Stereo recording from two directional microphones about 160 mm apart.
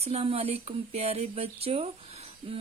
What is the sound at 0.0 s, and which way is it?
Speech, 40° right (ahead or behind).